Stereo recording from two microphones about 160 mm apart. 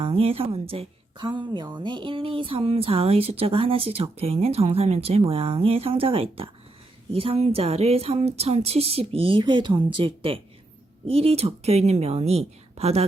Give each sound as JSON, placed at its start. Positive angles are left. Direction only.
{"t": 0.0, "sound": "a woman's voice", "side_deg": -35}